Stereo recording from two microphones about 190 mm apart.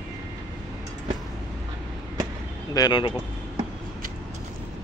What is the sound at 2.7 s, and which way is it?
Speech, 20° left (ahead or behind).